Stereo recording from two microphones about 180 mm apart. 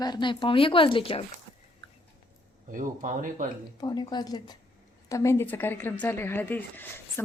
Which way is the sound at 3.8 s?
25° left (ahead or behind).